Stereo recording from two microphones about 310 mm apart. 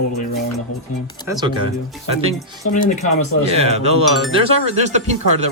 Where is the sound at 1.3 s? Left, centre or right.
Centre.